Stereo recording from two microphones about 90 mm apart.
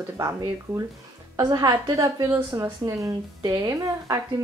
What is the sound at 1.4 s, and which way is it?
A woman's voice, 45° right (ahead or behind).